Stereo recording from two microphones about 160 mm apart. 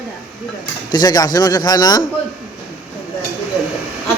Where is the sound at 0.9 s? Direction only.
25° left (ahead or behind).